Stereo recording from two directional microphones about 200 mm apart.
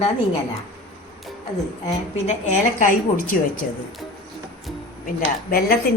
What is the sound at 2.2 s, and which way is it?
A woman's voice, 35° left (ahead or behind).